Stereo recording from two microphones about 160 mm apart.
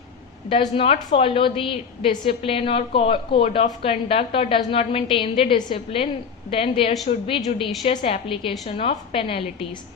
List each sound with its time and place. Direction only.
0.5 s a woman's voice: 35° left (ahead or behind)